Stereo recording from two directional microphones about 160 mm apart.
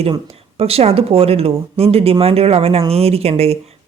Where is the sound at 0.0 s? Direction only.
40° right (ahead or behind).